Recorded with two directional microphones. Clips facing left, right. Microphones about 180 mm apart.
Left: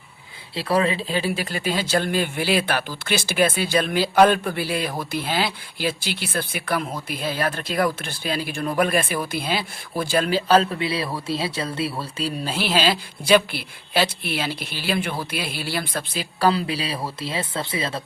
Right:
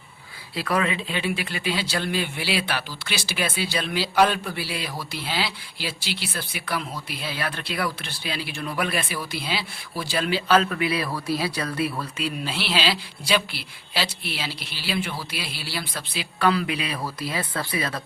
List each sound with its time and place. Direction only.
0.5 s speech: 30° left (ahead or behind); by 16.2 s 50° left (ahead or behind)
16.4 s speech: 30° left (ahead or behind)